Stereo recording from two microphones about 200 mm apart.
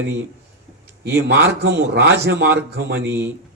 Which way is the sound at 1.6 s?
50° right (ahead or behind).